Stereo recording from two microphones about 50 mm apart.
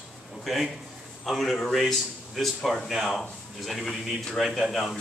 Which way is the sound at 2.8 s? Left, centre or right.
Centre.